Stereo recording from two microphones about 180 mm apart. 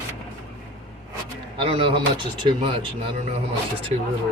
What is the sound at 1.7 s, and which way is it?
Speech, 30° right (ahead or behind).